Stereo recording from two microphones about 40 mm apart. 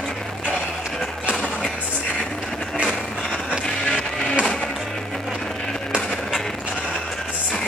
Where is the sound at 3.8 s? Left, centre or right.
Left.